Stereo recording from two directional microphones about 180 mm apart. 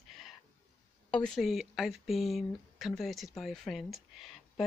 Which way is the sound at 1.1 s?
5° left (ahead or behind).